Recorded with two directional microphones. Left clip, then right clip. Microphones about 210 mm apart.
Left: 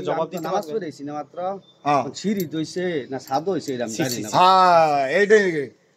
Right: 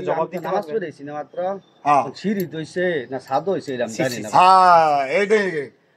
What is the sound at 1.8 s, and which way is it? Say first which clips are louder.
Speech: right 4 dB; 45° left (ahead or behind).